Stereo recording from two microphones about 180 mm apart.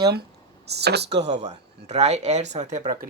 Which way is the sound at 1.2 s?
40° right (ahead or behind).